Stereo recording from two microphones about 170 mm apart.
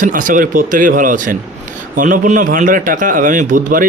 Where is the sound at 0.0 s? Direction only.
50° right (ahead or behind).